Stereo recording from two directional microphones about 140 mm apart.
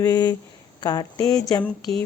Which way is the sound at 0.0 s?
30° left (ahead or behind).